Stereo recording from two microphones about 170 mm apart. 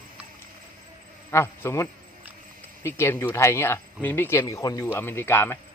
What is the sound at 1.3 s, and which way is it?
Speech, 15° left (ahead or behind).